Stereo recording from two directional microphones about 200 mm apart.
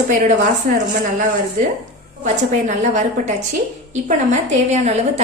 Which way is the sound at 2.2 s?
40° right (ahead or behind).